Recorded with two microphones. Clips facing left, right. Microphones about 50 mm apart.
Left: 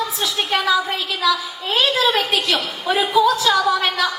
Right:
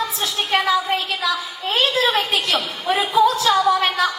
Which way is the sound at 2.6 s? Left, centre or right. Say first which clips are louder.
Left 1 dB; left.